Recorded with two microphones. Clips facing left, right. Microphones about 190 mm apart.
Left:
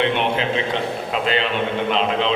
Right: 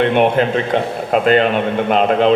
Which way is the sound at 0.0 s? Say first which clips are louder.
Right 7 dB; 50° right (ahead or behind).